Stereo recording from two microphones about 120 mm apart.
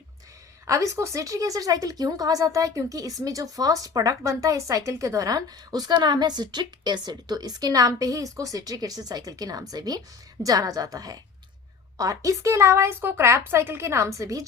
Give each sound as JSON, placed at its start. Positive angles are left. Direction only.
{"t": 0.7, "sound": "a woman's voice", "side_deg": -25}